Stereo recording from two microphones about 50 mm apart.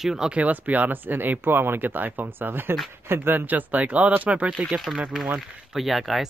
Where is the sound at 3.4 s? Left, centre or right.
Right.